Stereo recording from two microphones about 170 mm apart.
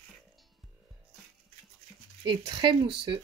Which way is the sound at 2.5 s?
30° right (ahead or behind).